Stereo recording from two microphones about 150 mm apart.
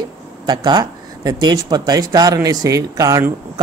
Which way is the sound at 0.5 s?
25° right (ahead or behind).